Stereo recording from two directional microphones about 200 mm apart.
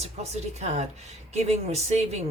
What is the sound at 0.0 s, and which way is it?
Speech, 35° right (ahead or behind).